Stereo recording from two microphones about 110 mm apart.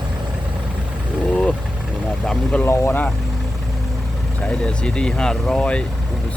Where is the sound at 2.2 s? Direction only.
10° left (ahead or behind).